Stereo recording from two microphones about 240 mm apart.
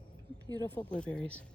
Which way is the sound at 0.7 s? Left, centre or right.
Centre.